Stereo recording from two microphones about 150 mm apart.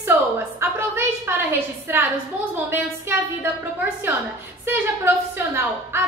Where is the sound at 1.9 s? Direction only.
15° right (ahead or behind).